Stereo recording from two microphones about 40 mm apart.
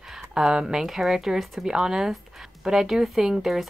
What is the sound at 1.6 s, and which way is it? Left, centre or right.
Speech, centre.